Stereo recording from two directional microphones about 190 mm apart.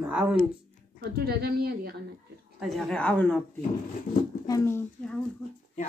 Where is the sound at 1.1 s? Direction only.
55° right (ahead or behind).